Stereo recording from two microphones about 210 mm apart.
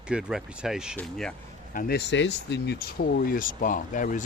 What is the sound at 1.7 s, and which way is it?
Speech, 45° left (ahead or behind).